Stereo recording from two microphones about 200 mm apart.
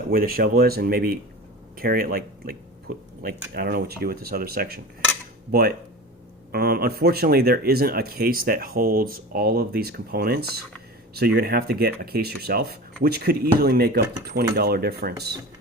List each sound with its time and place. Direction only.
0.1 s speech: 50° right (ahead or behind)